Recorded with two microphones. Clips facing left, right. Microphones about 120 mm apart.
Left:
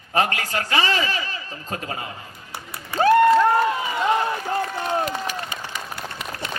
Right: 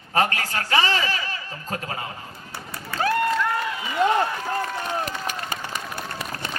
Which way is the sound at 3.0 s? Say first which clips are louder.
Left 8 dB; 40° left (ahead or behind).